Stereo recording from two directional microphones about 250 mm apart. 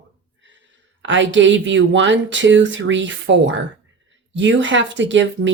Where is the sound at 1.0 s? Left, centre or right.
Right.